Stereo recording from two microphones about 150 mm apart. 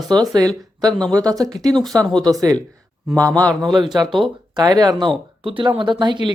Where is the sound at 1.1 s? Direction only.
25° right (ahead or behind).